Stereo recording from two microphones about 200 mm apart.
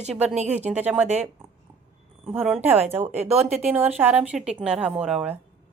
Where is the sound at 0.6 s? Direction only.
5° right (ahead or behind).